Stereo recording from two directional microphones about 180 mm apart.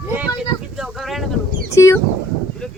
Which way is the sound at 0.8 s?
Centre (ahead or behind).